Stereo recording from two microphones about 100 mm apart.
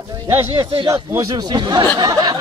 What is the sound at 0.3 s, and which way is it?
Speech, 30° right (ahead or behind).